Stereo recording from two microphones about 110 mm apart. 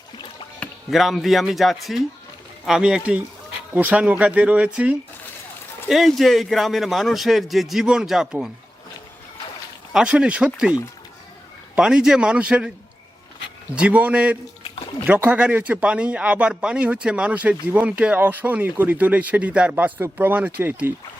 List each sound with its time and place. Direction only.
0.9 s speech: centre (ahead or behind)
5.9 s speech: centre (ahead or behind)
9.9 s speech: 5° right (ahead or behind)
13.7 s speech: 10° right (ahead or behind)
14.6 s a sound: 55° left (ahead or behind)
15.0 s speech: 15° right (ahead or behind)